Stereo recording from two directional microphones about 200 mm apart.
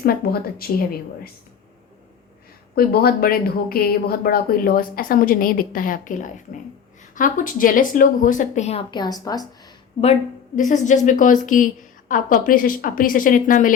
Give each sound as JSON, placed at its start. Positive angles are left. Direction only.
{"t": 0.0, "sound": "speech", "side_deg": 50}
{"t": 2.7, "sound": "a woman's voice", "side_deg": 50}
{"t": 10.0, "sound": "a woman's voice", "side_deg": 35}